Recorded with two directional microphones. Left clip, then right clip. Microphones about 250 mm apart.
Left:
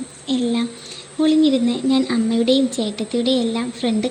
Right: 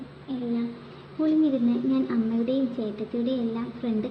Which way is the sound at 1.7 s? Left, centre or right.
Left.